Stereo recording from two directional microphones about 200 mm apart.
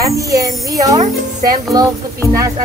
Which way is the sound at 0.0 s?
15° right (ahead or behind).